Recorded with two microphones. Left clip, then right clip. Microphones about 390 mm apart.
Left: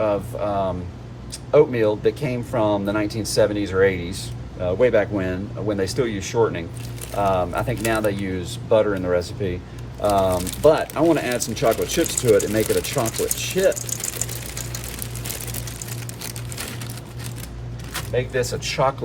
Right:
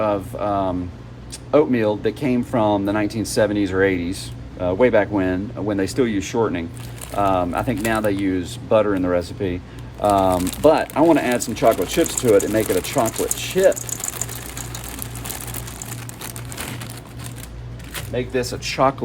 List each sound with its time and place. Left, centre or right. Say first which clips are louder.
0.0 s a sound: right 1 dB; right
1.5 s speech: even; right
18.1 s speech: left 1 dB; centre